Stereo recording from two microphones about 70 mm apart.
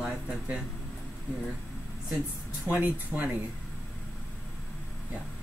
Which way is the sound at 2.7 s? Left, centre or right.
Right.